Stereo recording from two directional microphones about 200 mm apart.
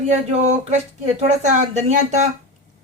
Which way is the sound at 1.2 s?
35° right (ahead or behind).